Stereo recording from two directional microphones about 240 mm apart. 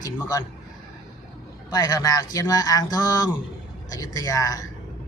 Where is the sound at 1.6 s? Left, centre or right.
Centre.